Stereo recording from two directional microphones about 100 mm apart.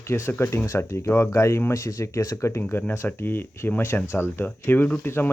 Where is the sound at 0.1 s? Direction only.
25° left (ahead or behind).